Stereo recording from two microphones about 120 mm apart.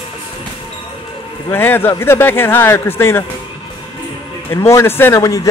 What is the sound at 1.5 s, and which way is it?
Speech, 20° left (ahead or behind).